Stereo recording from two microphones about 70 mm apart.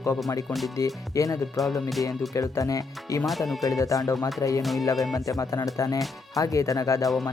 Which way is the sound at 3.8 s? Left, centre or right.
Left.